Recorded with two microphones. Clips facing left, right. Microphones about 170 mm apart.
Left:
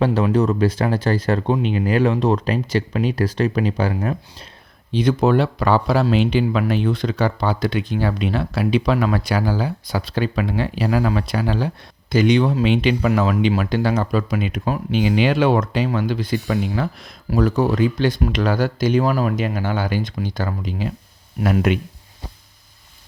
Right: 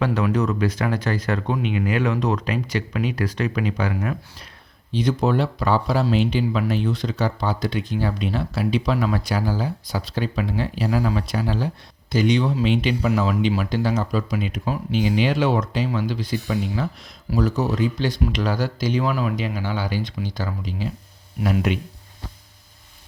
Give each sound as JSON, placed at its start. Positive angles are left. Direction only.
{"t": 0.0, "sound": "speech", "side_deg": 30}
{"t": 4.9, "sound": "speech", "side_deg": 65}